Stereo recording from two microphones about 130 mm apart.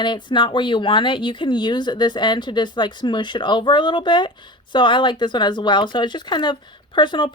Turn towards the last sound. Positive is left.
turn(degrees=40)  # may be behind; listen again after turning